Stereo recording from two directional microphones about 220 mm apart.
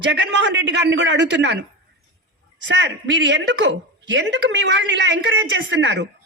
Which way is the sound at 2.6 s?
55° right (ahead or behind).